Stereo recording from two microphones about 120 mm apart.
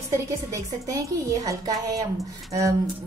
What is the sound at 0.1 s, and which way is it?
A woman's voice, 25° right (ahead or behind).